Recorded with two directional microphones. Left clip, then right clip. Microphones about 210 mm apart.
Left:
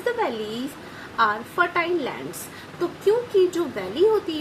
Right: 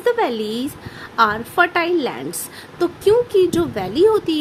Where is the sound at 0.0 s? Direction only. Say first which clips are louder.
Right 6 dB; 50° right (ahead or behind).